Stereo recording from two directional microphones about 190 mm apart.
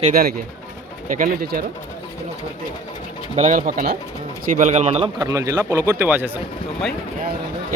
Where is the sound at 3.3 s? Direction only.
45° right (ahead or behind).